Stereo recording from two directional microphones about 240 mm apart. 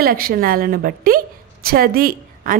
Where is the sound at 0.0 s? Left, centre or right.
Right.